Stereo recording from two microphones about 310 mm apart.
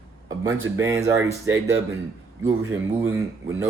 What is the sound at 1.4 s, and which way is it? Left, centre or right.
Speech, right.